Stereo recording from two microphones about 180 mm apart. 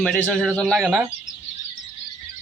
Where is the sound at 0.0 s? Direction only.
5° left (ahead or behind).